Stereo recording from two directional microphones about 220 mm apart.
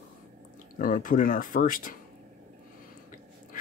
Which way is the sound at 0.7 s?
40° left (ahead or behind).